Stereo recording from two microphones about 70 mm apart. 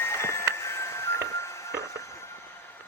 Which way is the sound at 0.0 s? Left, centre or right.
Left.